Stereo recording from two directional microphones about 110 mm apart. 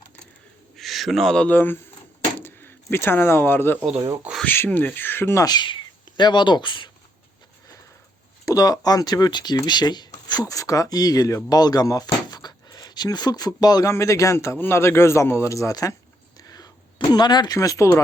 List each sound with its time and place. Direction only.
0.8 s a man's voice: centre (ahead or behind); by 5.5 s 25° left (ahead or behind)
5.5 s speech: 45° left (ahead or behind)
8.4 s a man's voice: 35° left (ahead or behind)
16.4 s a sound: 35° left (ahead or behind)
17.2 s speech: 40° left (ahead or behind)